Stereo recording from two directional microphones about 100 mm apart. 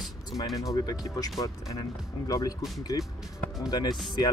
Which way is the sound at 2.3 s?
35° left (ahead or behind).